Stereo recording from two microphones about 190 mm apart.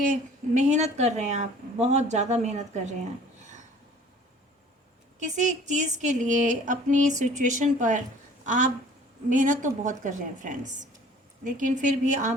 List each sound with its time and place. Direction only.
0.1 s a woman's voice: 40° right (ahead or behind)
5.2 s a woman's voice: 40° right (ahead or behind)